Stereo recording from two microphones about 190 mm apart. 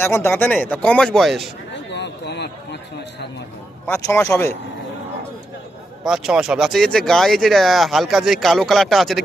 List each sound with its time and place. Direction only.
0.0 s speech: 10° left (ahead or behind)
1.7 s a sound: 65° left (ahead or behind)
3.8 s speech: 15° left (ahead or behind)
6.1 s speech: 5° right (ahead or behind)